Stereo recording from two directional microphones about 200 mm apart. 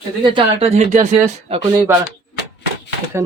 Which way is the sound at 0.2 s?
25° right (ahead or behind).